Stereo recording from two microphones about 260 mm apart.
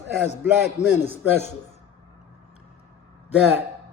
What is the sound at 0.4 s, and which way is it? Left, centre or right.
A man's voice, centre.